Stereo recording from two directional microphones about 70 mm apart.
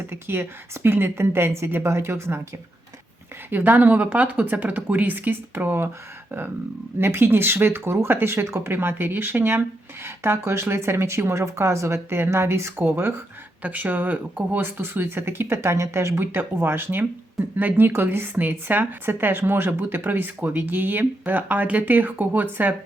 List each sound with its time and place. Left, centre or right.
0.1 s speech: right
3.5 s speech: right
7.0 s speech: right